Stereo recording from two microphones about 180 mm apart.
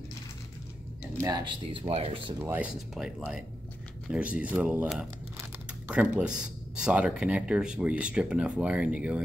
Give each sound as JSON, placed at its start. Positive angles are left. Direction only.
{"t": 1.2, "sound": "speech", "side_deg": -25}
{"t": 2.3, "sound": "speech", "side_deg": -10}
{"t": 6.1, "sound": "speech", "side_deg": -5}